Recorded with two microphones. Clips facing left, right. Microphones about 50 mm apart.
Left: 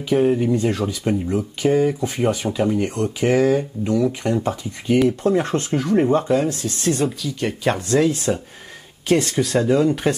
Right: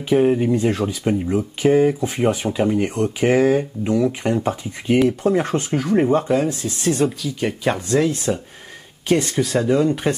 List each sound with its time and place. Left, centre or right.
0.1 s speech: centre
4.9 s speech: centre